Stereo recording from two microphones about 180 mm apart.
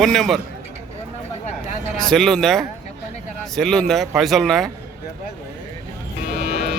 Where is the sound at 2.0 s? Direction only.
Centre (ahead or behind).